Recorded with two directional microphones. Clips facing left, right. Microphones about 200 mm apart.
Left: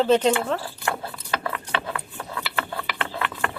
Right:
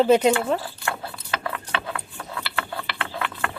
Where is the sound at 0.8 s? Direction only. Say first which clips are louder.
Left 2 dB; 10° left (ahead or behind).